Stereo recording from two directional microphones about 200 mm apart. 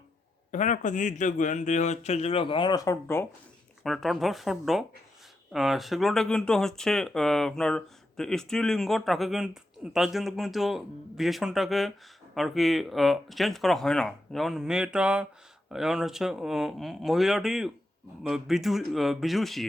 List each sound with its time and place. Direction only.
0.5 s speech: 40° left (ahead or behind); by 3.2 s 15° left (ahead or behind)
3.8 s speech: centre (ahead or behind)